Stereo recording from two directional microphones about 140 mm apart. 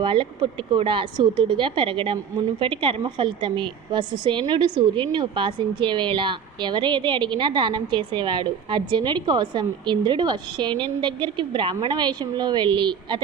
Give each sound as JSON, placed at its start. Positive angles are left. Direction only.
{"t": 0.0, "sound": "a woman's voice", "side_deg": -40}